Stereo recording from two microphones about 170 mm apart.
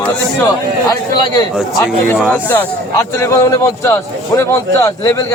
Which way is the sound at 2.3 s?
10° left (ahead or behind).